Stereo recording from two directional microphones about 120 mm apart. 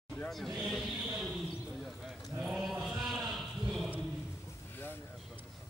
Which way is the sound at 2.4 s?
Centre (ahead or behind).